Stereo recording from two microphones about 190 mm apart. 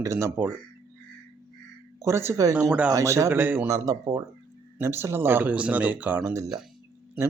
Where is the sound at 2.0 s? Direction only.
15° right (ahead or behind).